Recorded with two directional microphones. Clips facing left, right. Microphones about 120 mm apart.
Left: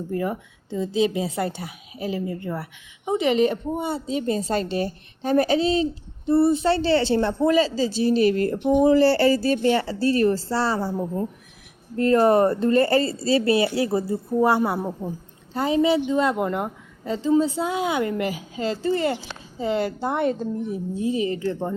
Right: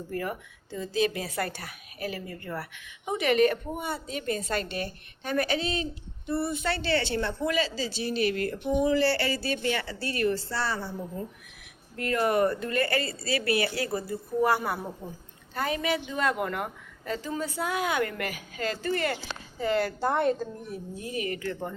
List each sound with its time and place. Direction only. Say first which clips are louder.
0.1 s a woman's voice: left 6 dB; 20° left (ahead or behind)